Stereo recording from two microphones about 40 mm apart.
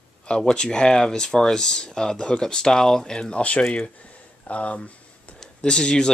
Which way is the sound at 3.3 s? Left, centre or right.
Left.